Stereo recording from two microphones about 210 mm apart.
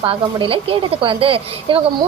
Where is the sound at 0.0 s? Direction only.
25° right (ahead or behind).